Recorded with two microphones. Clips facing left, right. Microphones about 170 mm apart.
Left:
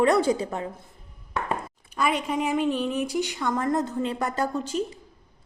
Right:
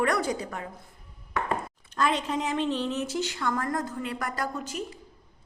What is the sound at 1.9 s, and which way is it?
Speech, 10° left (ahead or behind).